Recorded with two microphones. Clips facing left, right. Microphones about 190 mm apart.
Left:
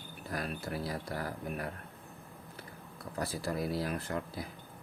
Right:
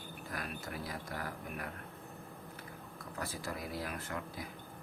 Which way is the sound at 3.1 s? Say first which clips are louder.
Left 7 dB; 35° left (ahead or behind).